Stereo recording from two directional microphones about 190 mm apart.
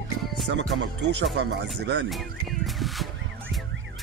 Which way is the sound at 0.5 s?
65° right (ahead or behind).